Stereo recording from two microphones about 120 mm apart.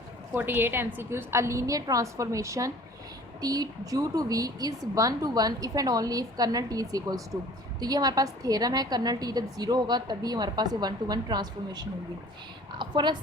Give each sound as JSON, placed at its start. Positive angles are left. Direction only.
{"t": 0.3, "sound": "a woman's voice", "side_deg": -15}